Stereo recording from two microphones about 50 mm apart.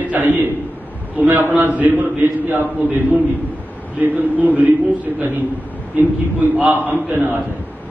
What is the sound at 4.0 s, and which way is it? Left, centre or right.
Speech, right.